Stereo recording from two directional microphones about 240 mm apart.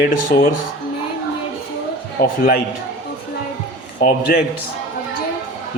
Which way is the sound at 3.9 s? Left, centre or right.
Left.